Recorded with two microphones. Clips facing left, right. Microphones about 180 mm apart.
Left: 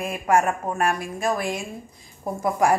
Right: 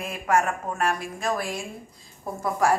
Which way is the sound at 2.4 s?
15° left (ahead or behind).